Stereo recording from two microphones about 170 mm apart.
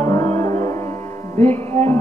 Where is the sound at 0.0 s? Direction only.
15° left (ahead or behind).